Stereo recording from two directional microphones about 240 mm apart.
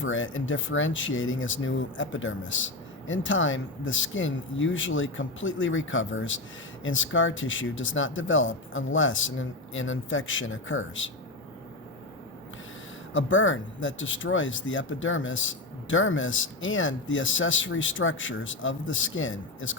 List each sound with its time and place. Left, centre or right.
0.0 s speech: left
13.1 s speech: left